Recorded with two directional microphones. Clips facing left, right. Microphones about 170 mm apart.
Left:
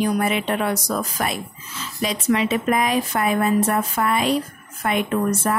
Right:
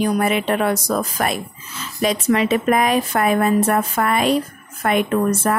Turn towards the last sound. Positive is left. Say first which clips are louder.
# right 3 dB
turn(degrees=-55)  # may be behind; listen again after turning